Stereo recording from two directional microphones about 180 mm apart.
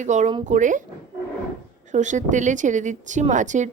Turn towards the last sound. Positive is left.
turn(degrees=-45)  # may be behind; listen again after turning